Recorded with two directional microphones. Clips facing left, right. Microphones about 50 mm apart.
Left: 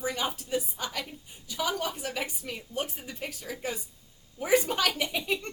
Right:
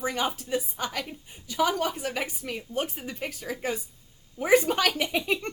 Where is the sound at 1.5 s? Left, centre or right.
Right.